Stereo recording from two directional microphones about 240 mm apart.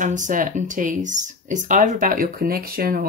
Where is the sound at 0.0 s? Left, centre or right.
Right.